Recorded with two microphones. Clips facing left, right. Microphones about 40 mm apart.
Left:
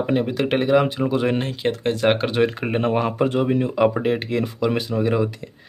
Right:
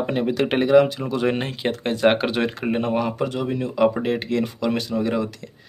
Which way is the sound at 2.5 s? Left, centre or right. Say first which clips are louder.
Left 1 dB; centre.